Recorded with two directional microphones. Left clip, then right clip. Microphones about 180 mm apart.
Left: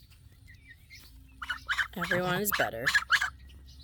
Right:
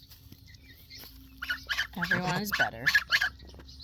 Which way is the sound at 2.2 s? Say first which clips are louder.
Left 2 dB; 40° left (ahead or behind).